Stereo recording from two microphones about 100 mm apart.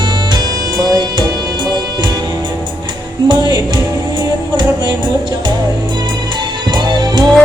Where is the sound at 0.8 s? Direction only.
40° right (ahead or behind).